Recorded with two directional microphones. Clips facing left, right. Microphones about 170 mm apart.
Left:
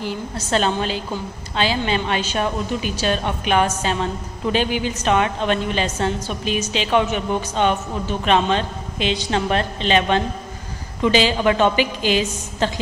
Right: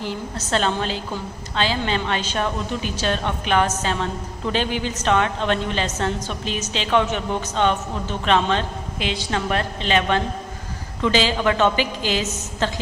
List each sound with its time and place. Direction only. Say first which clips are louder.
0.0 s a woman's voice: left 1 dB; 10° left (ahead or behind)